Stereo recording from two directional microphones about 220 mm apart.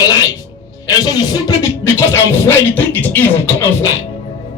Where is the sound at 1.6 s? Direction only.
15° left (ahead or behind).